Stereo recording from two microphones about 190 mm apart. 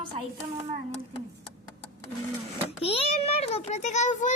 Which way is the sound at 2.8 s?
30° left (ahead or behind).